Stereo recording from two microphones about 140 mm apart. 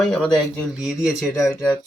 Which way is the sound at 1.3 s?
20° left (ahead or behind).